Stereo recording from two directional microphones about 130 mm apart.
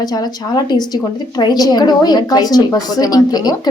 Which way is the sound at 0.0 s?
30° left (ahead or behind).